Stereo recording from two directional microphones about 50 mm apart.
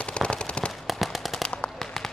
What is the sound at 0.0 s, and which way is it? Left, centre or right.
Machine gun, centre.